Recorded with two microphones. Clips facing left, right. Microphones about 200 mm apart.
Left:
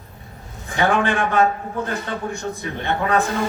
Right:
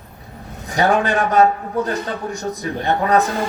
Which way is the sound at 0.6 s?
40° right (ahead or behind).